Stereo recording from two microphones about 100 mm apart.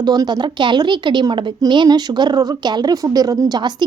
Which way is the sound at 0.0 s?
45° right (ahead or behind).